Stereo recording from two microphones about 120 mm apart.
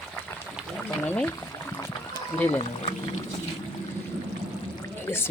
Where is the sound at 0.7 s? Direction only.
10° left (ahead or behind).